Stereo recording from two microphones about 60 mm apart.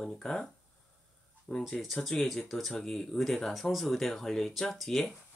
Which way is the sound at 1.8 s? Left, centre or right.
Centre.